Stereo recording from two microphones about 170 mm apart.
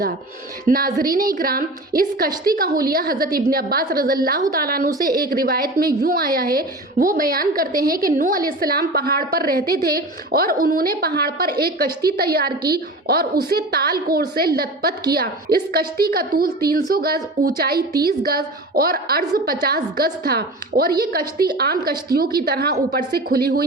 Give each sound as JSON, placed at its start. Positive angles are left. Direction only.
{"t": 0.7, "sound": "a woman's voice", "side_deg": -60}